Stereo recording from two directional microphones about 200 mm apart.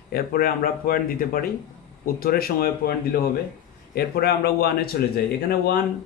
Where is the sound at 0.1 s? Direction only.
50° left (ahead or behind).